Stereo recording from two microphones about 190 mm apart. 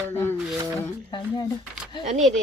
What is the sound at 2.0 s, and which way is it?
Speech, 40° right (ahead or behind).